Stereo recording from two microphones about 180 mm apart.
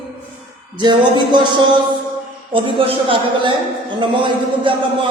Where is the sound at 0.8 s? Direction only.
25° right (ahead or behind).